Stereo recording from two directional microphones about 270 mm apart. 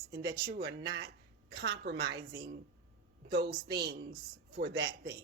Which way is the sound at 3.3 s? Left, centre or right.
Right.